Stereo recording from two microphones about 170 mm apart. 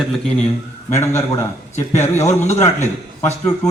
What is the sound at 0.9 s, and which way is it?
A man's voice, 15° left (ahead or behind).